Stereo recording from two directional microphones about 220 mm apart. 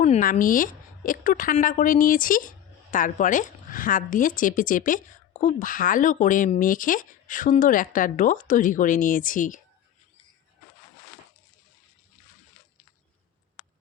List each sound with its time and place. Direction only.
0.0 s a woman's voice: 35° left (ahead or behind)